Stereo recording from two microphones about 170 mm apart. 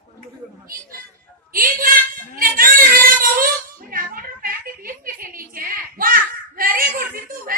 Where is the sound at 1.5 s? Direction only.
55° right (ahead or behind).